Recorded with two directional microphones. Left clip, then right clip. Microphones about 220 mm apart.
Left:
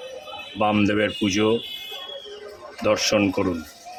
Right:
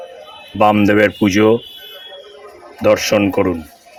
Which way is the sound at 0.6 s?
30° right (ahead or behind).